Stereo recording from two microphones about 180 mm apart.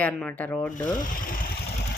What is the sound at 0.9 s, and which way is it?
Speech, 50° left (ahead or behind).